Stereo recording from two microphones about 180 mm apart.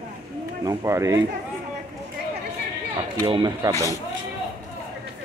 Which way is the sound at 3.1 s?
25° right (ahead or behind).